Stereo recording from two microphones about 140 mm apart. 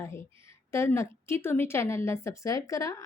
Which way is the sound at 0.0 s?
20° left (ahead or behind).